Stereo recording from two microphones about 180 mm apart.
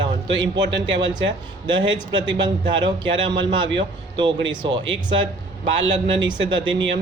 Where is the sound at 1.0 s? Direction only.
25° right (ahead or behind).